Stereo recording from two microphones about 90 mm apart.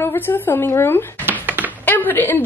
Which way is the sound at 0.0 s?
25° left (ahead or behind).